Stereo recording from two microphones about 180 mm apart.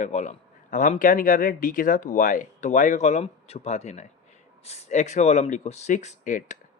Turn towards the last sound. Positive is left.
turn(degrees=45)  # may be behind; listen again after turning